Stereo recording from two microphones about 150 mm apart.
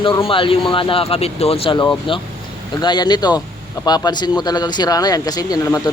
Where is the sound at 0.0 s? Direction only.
35° left (ahead or behind).